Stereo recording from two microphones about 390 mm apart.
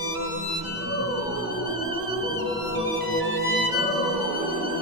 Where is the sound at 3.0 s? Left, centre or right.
Left.